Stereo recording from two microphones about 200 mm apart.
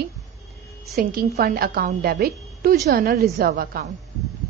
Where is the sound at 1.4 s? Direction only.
50° right (ahead or behind).